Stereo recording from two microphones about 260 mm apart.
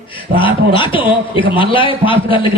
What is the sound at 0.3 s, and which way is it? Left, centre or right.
A man's voice, centre.